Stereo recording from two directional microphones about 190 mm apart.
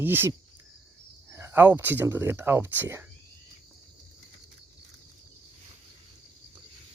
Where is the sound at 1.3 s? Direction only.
10° right (ahead or behind).